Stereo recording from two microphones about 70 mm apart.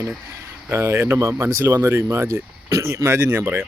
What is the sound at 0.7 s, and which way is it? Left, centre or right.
Speech, right.